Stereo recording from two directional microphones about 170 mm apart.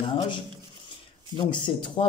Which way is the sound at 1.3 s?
30° left (ahead or behind).